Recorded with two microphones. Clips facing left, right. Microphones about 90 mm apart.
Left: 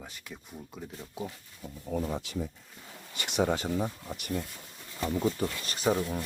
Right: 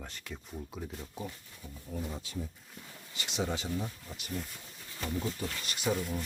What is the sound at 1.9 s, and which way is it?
Speech, 90° left.